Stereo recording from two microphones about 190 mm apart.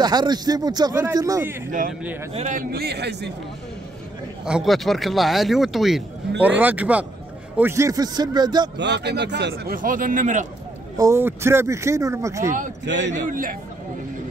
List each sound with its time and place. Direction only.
0.0 s speech: 20° right (ahead or behind)
2.3 s speech: 40° right (ahead or behind); by 3.3 s 60° right (ahead or behind)
4.5 s speech: centre (ahead or behind); by 8.6 s 20° right (ahead or behind)
8.7 s speech: 65° right (ahead or behind); by 10.4 s 40° right (ahead or behind)
11.0 s speech: 15° right (ahead or behind)
12.8 s a man's voice: 70° right (ahead or behind)
13.1 s a man's voice: 45° right (ahead or behind)